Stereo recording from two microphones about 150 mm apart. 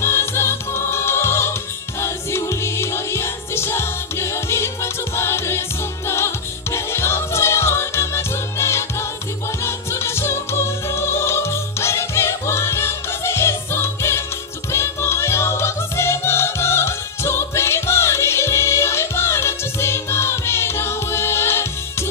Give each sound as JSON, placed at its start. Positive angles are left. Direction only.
{"t": 0.0, "sound": "music", "side_deg": 15}